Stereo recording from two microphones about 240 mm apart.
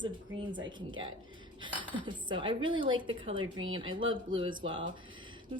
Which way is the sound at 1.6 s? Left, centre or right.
Centre.